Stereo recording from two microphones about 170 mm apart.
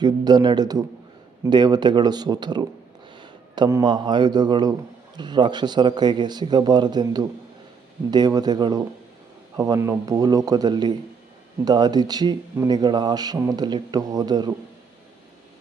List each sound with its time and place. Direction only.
0.0 s speech: 25° right (ahead or behind)
3.2 s a sound: 25° right (ahead or behind)
3.8 s speech: 25° right (ahead or behind)